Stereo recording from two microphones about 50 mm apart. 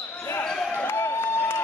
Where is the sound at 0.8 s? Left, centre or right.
Left.